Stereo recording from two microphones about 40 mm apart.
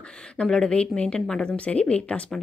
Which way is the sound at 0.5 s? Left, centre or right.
Left.